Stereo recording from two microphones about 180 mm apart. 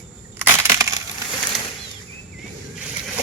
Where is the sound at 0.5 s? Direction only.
15° right (ahead or behind).